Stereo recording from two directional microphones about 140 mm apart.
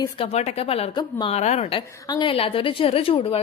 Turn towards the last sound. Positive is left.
turn(degrees=40)  # may be behind; listen again after turning